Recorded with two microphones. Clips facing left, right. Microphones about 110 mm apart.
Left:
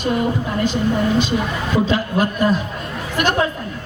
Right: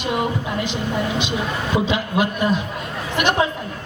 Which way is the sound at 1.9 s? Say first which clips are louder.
Left 2 dB; 40° left (ahead or behind).